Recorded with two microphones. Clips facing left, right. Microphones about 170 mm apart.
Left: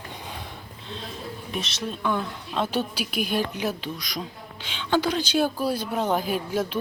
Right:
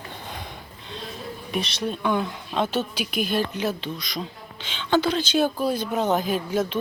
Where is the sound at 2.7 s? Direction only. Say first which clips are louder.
Right 1 dB; 10° left (ahead or behind).